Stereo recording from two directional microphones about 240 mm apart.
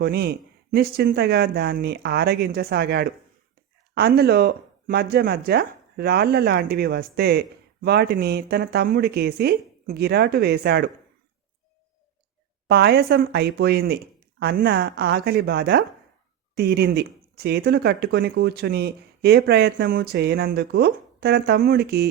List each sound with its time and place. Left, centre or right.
0.0 s speech: right
12.6 s speech: right